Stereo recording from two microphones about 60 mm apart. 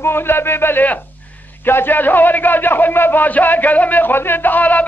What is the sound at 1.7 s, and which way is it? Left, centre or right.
A man's voice, left.